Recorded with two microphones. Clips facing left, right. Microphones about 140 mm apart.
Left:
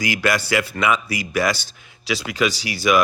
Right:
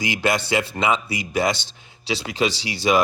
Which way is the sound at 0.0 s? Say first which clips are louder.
Left 1 dB; 25° right (ahead or behind).